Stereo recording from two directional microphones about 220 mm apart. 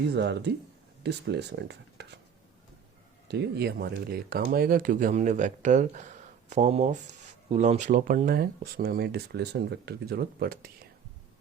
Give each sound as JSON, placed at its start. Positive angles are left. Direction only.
{"t": 0.1, "sound": "speech", "side_deg": -50}
{"t": 3.2, "sound": "speech", "side_deg": -50}